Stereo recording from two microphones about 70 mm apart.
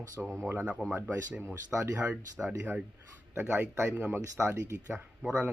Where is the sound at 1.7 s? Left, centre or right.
Right.